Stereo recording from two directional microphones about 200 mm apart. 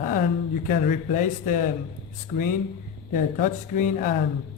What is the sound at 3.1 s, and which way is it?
Speech, 40° left (ahead or behind).